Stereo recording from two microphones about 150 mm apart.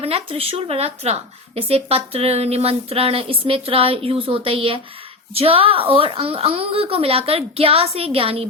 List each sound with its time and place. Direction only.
0.0 s speech: 40° right (ahead or behind)